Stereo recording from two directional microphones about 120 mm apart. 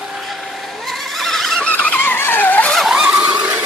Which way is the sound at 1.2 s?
Centre (ahead or behind).